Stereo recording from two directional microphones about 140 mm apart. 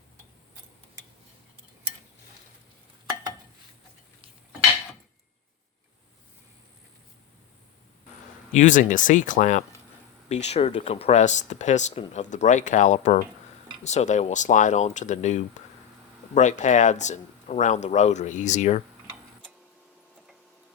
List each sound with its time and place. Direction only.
8.5 s speech: 65° left (ahead or behind)
10.2 s speech: 50° left (ahead or behind)